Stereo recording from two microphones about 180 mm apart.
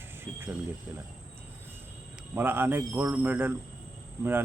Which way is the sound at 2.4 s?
10° right (ahead or behind).